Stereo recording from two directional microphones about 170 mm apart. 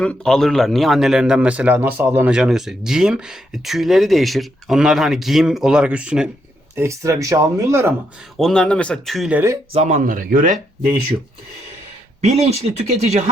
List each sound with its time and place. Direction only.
0.0 s speech: 5° left (ahead or behind)
6.7 s speech: 15° right (ahead or behind)
8.4 s speech: 5° left (ahead or behind)
9.7 s speech: 45° right (ahead or behind)
12.2 s speech: 40° right (ahead or behind)